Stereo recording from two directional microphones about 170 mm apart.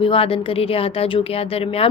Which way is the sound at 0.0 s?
30° left (ahead or behind).